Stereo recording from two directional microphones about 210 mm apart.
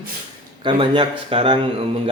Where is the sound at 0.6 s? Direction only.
25° right (ahead or behind).